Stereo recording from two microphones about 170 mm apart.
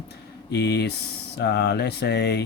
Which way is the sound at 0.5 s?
85° left.